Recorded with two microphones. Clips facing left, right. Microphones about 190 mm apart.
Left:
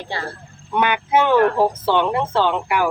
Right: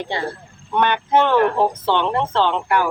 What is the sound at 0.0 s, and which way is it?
Speech, 20° right (ahead or behind).